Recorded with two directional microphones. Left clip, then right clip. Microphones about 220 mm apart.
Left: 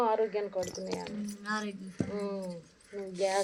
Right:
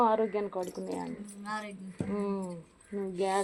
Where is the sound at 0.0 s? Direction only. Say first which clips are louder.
Right 2 dB; 45° right (ahead or behind).